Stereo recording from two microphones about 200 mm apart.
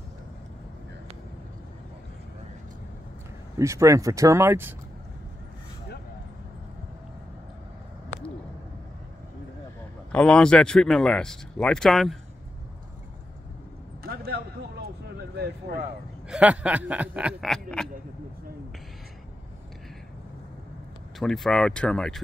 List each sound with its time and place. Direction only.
3.5 s speech: 15° right (ahead or behind)
10.1 s speech: 5° left (ahead or behind)
14.0 s a sound: 50° right (ahead or behind)
15.3 s speech: 55° right (ahead or behind)
16.3 s speech: 5° right (ahead or behind)
21.2 s speech: centre (ahead or behind)